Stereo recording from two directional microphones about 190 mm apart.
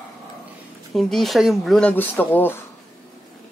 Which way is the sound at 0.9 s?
Centre (ahead or behind).